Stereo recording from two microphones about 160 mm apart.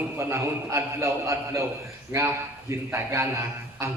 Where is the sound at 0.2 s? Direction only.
15° right (ahead or behind).